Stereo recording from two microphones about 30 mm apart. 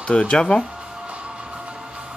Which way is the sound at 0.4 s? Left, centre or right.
Left.